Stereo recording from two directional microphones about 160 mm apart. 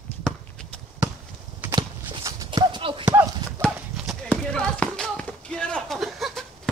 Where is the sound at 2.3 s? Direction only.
25° right (ahead or behind).